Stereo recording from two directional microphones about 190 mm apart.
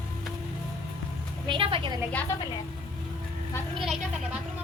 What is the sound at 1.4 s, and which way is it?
Speech, 25° right (ahead or behind).